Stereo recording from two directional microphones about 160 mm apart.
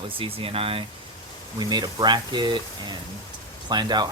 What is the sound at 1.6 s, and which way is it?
Speech, 25° right (ahead or behind).